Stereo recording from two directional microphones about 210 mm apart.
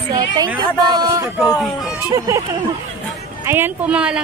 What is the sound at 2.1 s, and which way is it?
A woman's voice, 15° right (ahead or behind).